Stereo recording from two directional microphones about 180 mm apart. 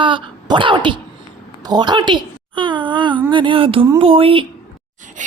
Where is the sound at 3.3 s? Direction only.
25° right (ahead or behind).